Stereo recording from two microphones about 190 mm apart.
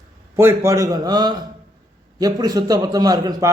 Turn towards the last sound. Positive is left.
turn(degrees=-20)  # may be behind; listen again after turning